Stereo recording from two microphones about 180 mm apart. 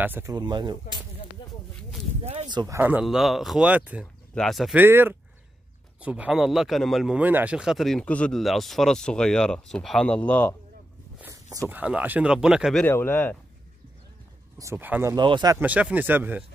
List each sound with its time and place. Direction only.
0.0 s speech: 15° right (ahead or behind)
2.4 s speech: 20° right (ahead or behind)
2.8 s speech: 5° right (ahead or behind)
4.8 s speech: 10° right (ahead or behind); by 10.5 s 10° left (ahead or behind)
11.5 s speech: 10° right (ahead or behind)
12.8 s speech: 10° left (ahead or behind)
14.6 s speech: 15° right (ahead or behind)
15.1 s speech: 25° right (ahead or behind)
15.6 s speech: 10° right (ahead or behind)